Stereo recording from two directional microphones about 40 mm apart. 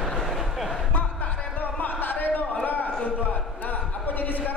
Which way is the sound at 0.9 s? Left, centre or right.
Left.